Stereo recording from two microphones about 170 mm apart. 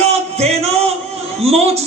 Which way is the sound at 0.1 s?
40° right (ahead or behind).